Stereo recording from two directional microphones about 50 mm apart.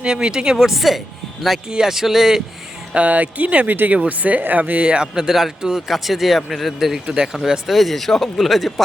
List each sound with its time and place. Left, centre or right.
0.0 s speech: centre
0.5 s speech: centre
2.9 s speech: right; by 6.7 s centre
6.7 s speech: centre